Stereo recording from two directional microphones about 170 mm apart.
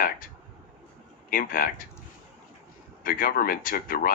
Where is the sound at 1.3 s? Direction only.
55° left (ahead or behind).